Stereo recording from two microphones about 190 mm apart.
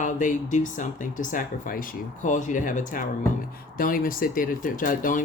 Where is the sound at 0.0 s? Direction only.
40° left (ahead or behind).